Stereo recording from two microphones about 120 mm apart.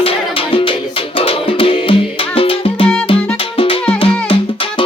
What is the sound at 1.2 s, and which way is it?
Music, 50° left (ahead or behind).